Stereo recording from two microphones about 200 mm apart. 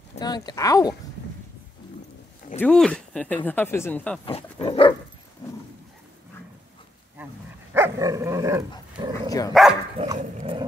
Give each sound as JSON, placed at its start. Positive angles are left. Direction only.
{"t": 0.2, "sound": "speech", "side_deg": 20}
{"t": 2.5, "sound": "speech", "side_deg": 5}
{"t": 4.3, "sound": "speech", "side_deg": 30}
{"t": 7.7, "sound": "dog", "side_deg": -15}
{"t": 9.5, "sound": "speech", "side_deg": 0}
{"t": 10.1, "sound": "dog", "side_deg": -35}